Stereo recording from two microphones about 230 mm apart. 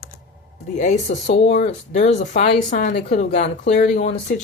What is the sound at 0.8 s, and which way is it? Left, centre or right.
Speech, left.